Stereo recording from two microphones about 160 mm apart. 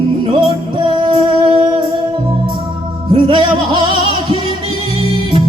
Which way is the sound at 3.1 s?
30° right (ahead or behind).